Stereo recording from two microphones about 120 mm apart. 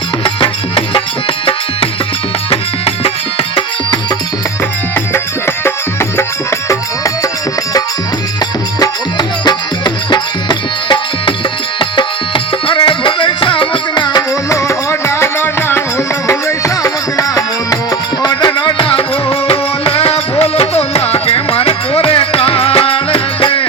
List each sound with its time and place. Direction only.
0.3 s music: 45° left (ahead or behind)
2.5 s music: 50° left (ahead or behind)
8.8 s music: 35° left (ahead or behind)